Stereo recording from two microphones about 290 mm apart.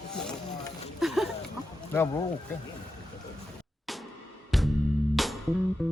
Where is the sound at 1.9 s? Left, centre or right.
Centre.